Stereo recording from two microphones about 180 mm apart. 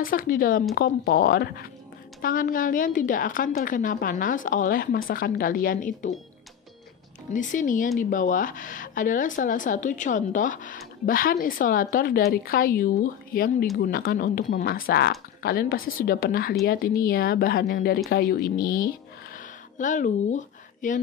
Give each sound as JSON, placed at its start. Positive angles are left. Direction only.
{"t": 0.0, "sound": "speech", "side_deg": 50}
{"t": 7.3, "sound": "speech", "side_deg": 45}
{"t": 19.3, "sound": "a sound", "side_deg": 45}